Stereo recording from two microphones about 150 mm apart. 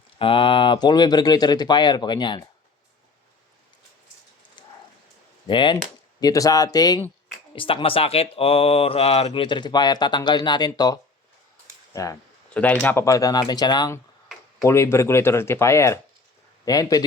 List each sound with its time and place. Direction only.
0.2 s speech: 35° left (ahead or behind)
5.5 s speech: 30° left (ahead or behind)
7.5 s speech: 35° left (ahead or behind)
12.5 s speech: 10° left (ahead or behind)
13.1 s speech: 25° left (ahead or behind)
14.6 s speech: 20° left (ahead or behind)